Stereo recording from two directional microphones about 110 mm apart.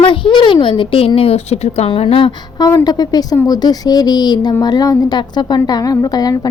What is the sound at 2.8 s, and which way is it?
A woman's voice, 35° left (ahead or behind).